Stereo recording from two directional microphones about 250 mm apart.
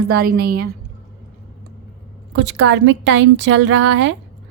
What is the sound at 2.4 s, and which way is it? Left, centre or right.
A woman's voice, right.